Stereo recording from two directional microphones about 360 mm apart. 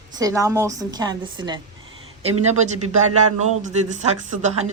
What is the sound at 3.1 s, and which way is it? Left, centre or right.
Speech, right.